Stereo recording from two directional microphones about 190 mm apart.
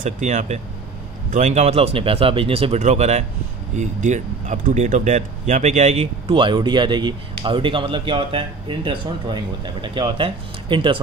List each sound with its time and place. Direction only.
0.0 s speech: 40° right (ahead or behind)